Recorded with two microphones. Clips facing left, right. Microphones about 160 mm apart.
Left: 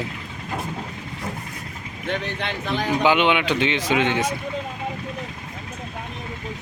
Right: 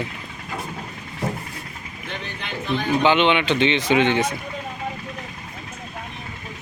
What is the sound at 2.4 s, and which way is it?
Speech, 90° left.